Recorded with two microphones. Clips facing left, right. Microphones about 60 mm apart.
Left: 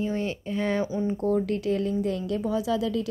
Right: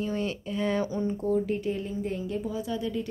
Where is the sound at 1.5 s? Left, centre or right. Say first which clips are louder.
Left 4 dB; left.